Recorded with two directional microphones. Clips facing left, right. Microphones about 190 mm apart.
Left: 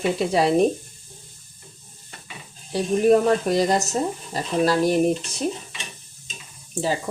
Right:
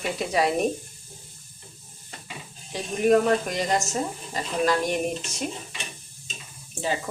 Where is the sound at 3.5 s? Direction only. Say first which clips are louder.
Left 6 dB; 35° left (ahead or behind).